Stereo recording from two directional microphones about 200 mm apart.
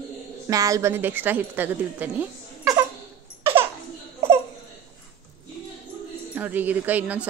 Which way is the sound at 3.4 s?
10° right (ahead or behind).